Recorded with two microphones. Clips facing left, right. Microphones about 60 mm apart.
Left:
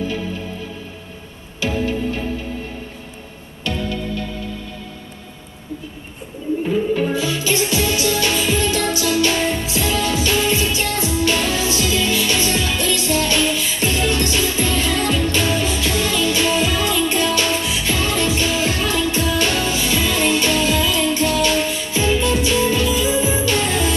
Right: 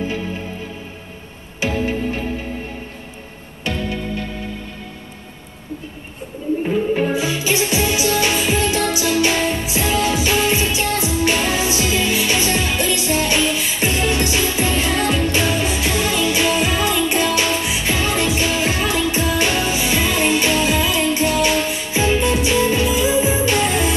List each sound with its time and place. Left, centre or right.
1.6 s music: right
3.6 s music: right
6.7 s music: right